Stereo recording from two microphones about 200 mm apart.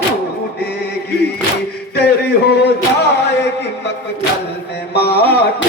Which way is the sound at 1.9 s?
55° left (ahead or behind).